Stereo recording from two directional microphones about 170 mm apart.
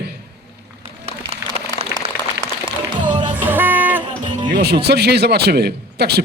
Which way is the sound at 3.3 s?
10° right (ahead or behind).